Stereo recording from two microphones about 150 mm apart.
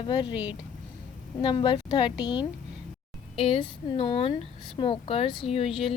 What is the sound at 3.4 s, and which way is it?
A woman's voice, 40° left (ahead or behind).